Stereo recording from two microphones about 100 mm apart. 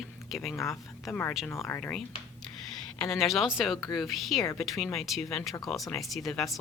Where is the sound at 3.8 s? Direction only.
40° left (ahead or behind).